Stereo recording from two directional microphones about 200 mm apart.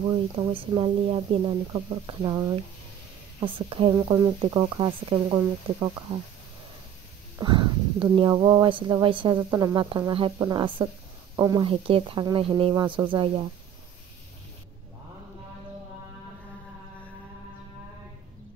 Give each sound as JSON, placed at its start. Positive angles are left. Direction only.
{"t": 0.4, "sound": "speech", "side_deg": -25}
{"t": 7.3, "sound": "speech", "side_deg": -20}